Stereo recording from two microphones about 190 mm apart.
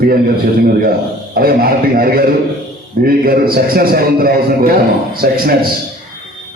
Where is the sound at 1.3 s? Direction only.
50° right (ahead or behind).